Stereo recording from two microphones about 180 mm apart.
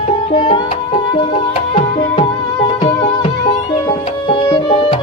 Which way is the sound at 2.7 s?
30° left (ahead or behind).